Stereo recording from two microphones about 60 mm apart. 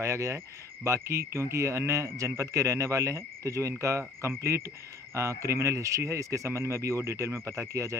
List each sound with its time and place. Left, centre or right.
0.0 s speech: right